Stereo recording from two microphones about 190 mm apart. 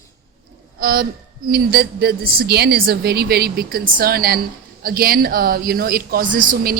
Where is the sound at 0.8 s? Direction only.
50° right (ahead or behind).